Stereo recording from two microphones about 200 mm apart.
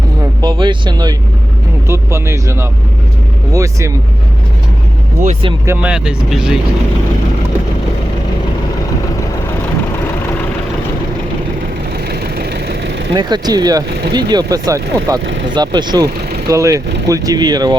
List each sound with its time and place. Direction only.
0.4 s speech: 25° right (ahead or behind)
5.2 s speech: 30° right (ahead or behind)
5.6 s speech: 5° right (ahead or behind)
11.9 s vehicle: 50° right (ahead or behind)
13.1 s speech: 20° right (ahead or behind)
15.3 s speech: 65° right (ahead or behind)
15.5 s speech: 20° right (ahead or behind)